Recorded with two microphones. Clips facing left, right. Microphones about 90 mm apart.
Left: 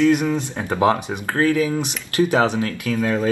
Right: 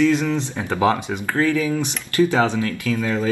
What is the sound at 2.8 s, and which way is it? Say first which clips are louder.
Speech: left 3 dB; 15° left (ahead or behind).